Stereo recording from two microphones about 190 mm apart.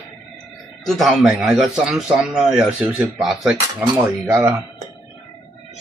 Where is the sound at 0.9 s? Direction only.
Centre (ahead or behind).